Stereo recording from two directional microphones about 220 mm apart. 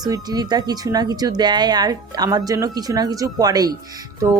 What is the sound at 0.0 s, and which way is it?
Speech, 15° right (ahead or behind).